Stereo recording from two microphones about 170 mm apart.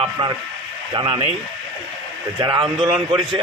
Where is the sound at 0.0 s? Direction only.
30° right (ahead or behind).